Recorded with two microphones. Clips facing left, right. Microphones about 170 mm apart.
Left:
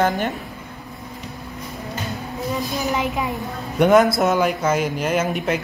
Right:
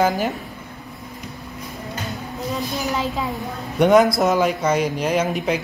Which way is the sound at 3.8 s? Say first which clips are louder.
Even; centre (ahead or behind).